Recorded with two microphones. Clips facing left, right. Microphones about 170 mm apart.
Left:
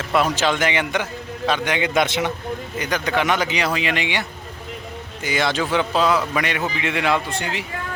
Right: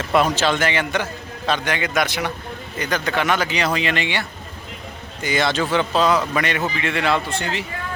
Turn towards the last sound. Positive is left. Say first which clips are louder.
# right 1 dB
turn(degrees=15)  # may be behind; listen again after turning